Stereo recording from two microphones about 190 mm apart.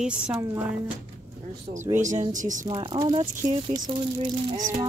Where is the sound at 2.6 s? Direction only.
25° right (ahead or behind).